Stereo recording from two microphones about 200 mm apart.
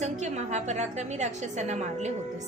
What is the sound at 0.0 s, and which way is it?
A woman's voice, 35° right (ahead or behind).